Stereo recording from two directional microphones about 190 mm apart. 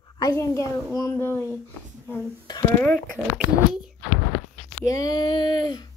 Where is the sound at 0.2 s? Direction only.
15° left (ahead or behind).